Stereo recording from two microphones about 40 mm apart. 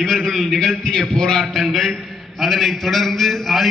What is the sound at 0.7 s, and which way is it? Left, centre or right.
A man's voice, left.